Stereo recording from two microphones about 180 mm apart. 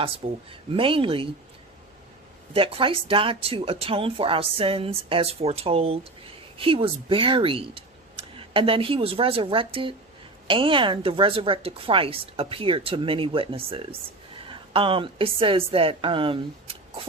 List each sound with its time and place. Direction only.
0.5 s a woman's voice: 30° right (ahead or behind)
2.5 s a woman's voice: 30° right (ahead or behind)